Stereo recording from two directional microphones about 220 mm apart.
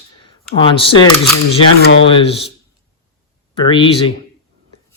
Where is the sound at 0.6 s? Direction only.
25° left (ahead or behind).